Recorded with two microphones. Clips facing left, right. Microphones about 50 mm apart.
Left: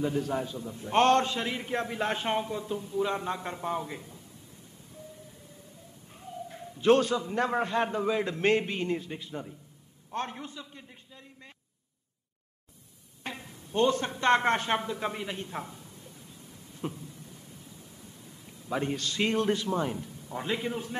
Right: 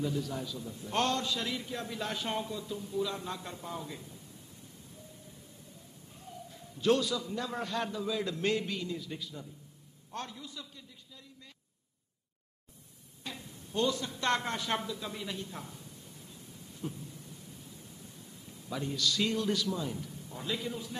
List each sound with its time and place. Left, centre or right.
0.0 s a man's voice: left
3.8 s a man's voice: left
6.1 s a sound: left
7.6 s a man's voice: left
10.1 s a man's voice: left
13.2 s a sound: left
14.4 s speech: left
15.1 s a man's voice: left
16.8 s speech: left
18.7 s a man's voice: left
20.0 s a man's voice: left